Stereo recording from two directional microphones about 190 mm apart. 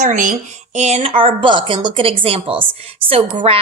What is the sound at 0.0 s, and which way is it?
A woman's voice, 40° right (ahead or behind).